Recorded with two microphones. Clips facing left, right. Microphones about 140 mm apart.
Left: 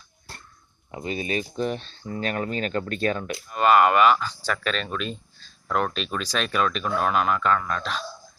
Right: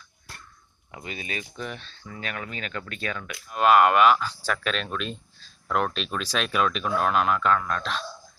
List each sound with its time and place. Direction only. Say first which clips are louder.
0.9 s speech: left 8 dB; 30° left (ahead or behind)
3.5 s speech: even; centre (ahead or behind)